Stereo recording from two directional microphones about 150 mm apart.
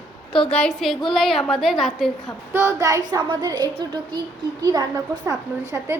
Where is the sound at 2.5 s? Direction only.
20° right (ahead or behind).